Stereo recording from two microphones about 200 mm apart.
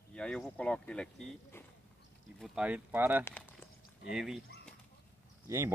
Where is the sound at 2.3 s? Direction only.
Centre (ahead or behind).